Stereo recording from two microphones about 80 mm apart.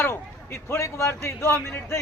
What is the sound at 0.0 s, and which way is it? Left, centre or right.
A man's voice, left.